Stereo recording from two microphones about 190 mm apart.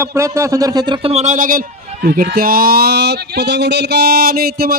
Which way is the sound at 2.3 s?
50° right (ahead or behind).